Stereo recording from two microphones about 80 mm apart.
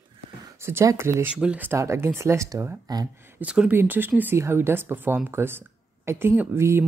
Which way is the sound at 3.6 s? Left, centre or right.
Right.